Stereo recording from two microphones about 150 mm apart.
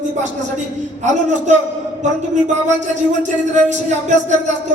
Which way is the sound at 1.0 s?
55° right (ahead or behind).